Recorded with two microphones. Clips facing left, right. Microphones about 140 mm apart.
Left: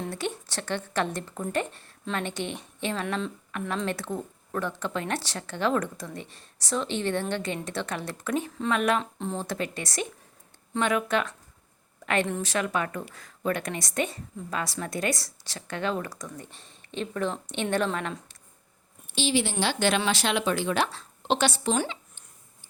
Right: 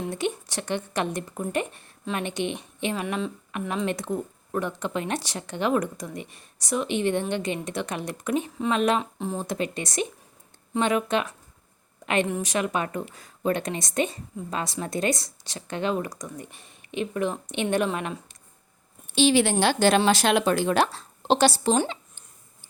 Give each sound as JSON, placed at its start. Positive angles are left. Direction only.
{"t": 0.1, "sound": "speech", "side_deg": -15}
{"t": 3.5, "sound": "speech", "side_deg": -20}
{"t": 9.0, "sound": "speech", "side_deg": -5}
{"t": 9.4, "sound": "speech", "side_deg": -20}
{"t": 19.0, "sound": "speech", "side_deg": -60}